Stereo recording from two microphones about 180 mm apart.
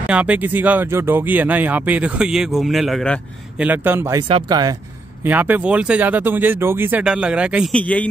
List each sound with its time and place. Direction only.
0.0 s speech: 5° right (ahead or behind)
3.6 s speech: 10° right (ahead or behind)
5.2 s speech: 10° right (ahead or behind)
7.7 s a man's voice: 10° left (ahead or behind)